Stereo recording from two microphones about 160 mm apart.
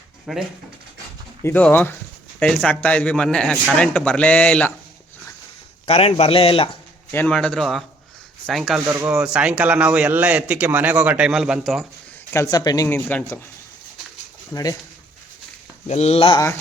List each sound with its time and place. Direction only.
0.3 s speech: centre (ahead or behind)
1.4 s a man's voice: 15° left (ahead or behind)
5.8 s a man's voice: 40° left (ahead or behind)
7.1 s speech: 10° left (ahead or behind)
8.9 s a man's voice: 15° right (ahead or behind)
12.3 s speech: 20° left (ahead or behind)
13.1 s a man's voice: 10° left (ahead or behind)
14.5 s speech: 25° left (ahead or behind)
15.9 s a man's voice: 40° left (ahead or behind)